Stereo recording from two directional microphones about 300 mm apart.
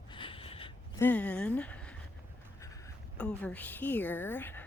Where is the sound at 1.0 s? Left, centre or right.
Centre.